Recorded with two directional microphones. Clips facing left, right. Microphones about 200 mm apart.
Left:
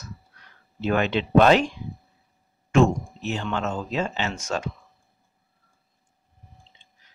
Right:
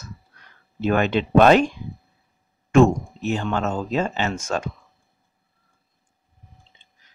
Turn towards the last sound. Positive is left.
turn(degrees=-50)  # may be behind; listen again after turning